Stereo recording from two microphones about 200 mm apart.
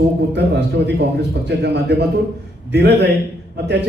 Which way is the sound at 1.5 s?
55° right (ahead or behind).